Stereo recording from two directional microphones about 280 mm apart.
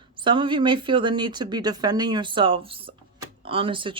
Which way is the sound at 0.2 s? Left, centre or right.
Centre.